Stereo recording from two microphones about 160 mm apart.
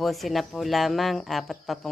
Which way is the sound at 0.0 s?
Centre (ahead or behind).